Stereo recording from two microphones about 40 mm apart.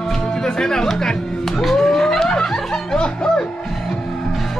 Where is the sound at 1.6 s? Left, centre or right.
Centre.